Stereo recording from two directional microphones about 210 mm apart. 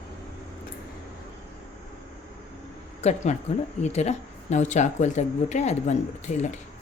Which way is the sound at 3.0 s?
30° left (ahead or behind).